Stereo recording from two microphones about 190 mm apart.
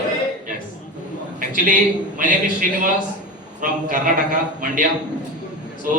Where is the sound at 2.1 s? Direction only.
45° right (ahead or behind).